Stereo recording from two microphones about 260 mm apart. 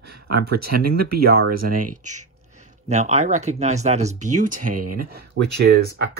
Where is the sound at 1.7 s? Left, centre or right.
Right.